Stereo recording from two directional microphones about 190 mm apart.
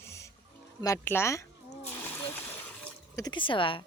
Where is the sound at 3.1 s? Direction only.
20° left (ahead or behind).